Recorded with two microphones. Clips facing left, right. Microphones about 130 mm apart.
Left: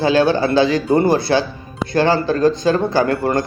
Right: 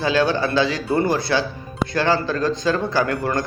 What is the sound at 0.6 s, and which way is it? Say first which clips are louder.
Speech: left 6 dB; 50° left (ahead or behind).